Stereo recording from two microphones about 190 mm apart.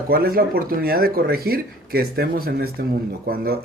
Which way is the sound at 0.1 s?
50° right (ahead or behind).